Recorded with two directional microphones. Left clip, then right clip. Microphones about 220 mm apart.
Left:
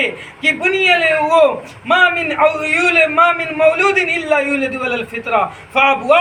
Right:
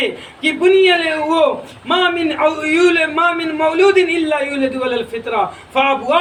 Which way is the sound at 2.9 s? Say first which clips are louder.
Left 3 dB; 25° right (ahead or behind).